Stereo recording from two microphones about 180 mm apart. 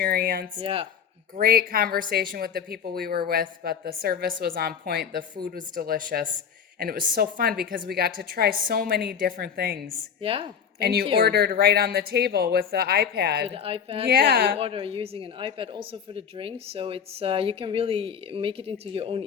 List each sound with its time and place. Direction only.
0.0 s speech: 60° right (ahead or behind)
0.6 s a woman's voice: 30° right (ahead or behind)
1.4 s speech: 55° right (ahead or behind)
10.2 s a woman's voice: 30° right (ahead or behind)
10.8 s speech: 65° right (ahead or behind)
13.5 s a woman's voice: 30° right (ahead or behind)
14.1 s speech: 55° right (ahead or behind)
14.6 s a woman's voice: 30° right (ahead or behind)